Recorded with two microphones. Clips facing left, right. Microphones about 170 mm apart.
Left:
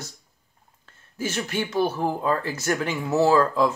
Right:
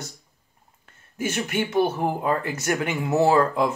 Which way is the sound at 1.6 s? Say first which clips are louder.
Right 2 dB; 20° right (ahead or behind).